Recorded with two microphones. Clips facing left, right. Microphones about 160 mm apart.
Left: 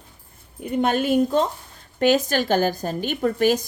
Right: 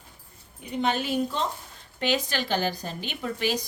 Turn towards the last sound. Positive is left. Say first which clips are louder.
# left 9 dB
turn(degrees=50)  # may be behind; listen again after turning